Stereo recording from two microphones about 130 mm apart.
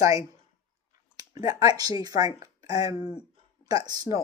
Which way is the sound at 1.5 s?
30° right (ahead or behind).